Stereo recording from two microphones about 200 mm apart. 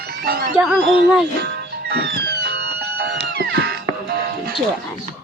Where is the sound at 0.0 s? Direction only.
50° right (ahead or behind).